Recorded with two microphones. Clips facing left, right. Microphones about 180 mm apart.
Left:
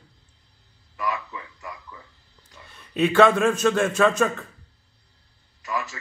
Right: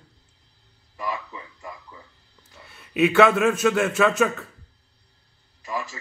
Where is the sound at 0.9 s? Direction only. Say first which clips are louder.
Left 2 dB; 30° right (ahead or behind).